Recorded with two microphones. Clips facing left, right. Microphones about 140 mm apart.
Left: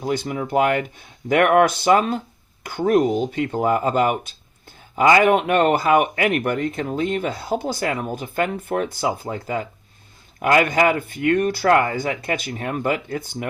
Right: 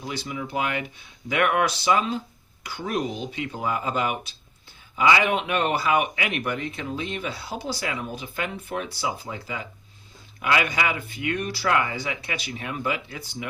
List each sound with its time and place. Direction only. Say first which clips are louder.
0.0 s speech: left 8 dB; 50° left (ahead or behind)